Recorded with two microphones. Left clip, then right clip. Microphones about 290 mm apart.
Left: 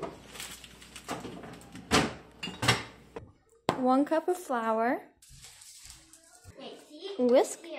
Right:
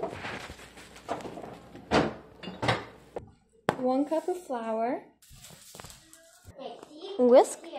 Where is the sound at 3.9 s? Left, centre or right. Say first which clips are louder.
Left 3 dB; left.